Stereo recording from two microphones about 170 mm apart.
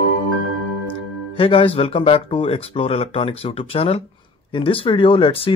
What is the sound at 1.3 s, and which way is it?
Speech, 35° left (ahead or behind).